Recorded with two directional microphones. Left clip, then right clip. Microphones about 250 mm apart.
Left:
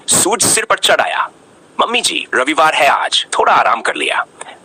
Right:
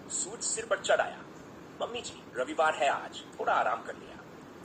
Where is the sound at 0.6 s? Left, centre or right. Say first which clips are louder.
Left 13 dB; left.